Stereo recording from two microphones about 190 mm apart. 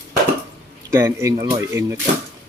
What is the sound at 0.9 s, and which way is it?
Speech, 15° right (ahead or behind).